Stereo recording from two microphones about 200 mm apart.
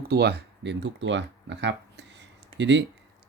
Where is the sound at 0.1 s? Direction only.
55° right (ahead or behind).